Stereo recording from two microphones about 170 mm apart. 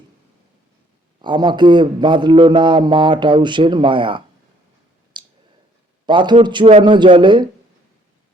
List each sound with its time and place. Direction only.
1.2 s a man's voice: 25° right (ahead or behind)
5.2 s clicking: 25° right (ahead or behind)
6.1 s a man's voice: 25° right (ahead or behind)